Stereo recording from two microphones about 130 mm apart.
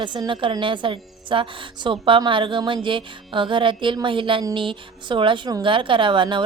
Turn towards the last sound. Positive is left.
turn(degrees=-40)  # may be behind; listen again after turning